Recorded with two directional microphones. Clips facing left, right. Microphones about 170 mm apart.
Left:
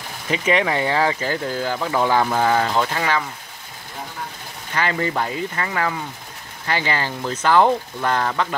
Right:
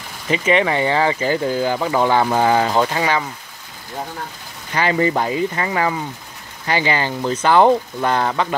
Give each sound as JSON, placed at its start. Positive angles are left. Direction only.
{"t": 0.3, "sound": "speech", "side_deg": 0}
{"t": 1.3, "sound": "speech", "side_deg": -15}
{"t": 2.3, "sound": "speech", "side_deg": -15}
{"t": 4.7, "sound": "speech", "side_deg": -15}
{"t": 7.5, "sound": "speech", "side_deg": -20}